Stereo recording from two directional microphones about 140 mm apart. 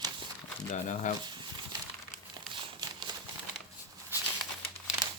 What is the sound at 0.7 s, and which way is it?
Speech, 60° left (ahead or behind).